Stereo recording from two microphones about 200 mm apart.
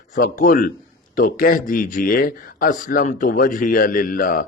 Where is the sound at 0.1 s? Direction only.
45° left (ahead or behind).